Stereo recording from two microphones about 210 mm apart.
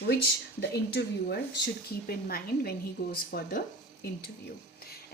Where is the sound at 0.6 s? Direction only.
50° left (ahead or behind).